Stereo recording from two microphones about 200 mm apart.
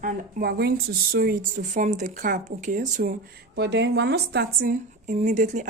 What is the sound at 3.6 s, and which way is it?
A woman's voice, 60° right (ahead or behind).